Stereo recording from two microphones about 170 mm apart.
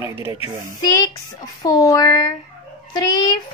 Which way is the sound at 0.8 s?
20° left (ahead or behind).